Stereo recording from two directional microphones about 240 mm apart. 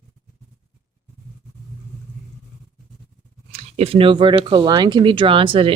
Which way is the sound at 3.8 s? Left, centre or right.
Right.